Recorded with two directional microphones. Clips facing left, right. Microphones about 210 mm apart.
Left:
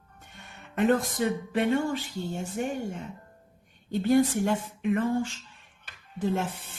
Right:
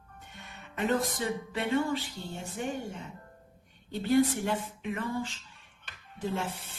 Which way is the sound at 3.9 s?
50° left (ahead or behind).